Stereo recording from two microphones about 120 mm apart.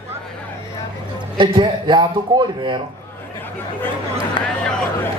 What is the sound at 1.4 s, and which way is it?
A man's voice, 45° right (ahead or behind).